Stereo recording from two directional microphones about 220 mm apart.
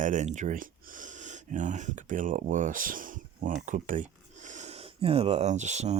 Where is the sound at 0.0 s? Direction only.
35° right (ahead or behind).